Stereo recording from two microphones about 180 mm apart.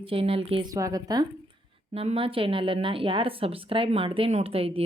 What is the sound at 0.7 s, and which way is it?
A woman's voice, 20° right (ahead or behind).